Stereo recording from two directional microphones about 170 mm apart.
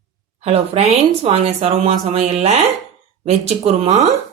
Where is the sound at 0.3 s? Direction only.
35° right (ahead or behind).